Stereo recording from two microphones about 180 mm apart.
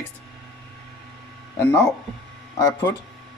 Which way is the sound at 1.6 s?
15° left (ahead or behind).